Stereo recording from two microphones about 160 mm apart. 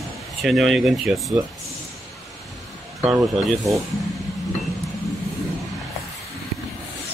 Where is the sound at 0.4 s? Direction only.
Centre (ahead or behind).